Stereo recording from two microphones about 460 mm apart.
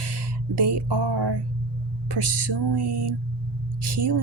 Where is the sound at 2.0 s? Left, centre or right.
Right.